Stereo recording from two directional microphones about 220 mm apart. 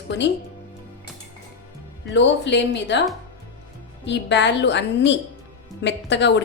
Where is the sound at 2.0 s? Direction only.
55° left (ahead or behind).